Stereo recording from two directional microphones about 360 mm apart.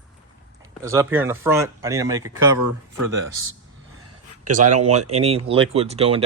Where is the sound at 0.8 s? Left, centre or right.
Centre.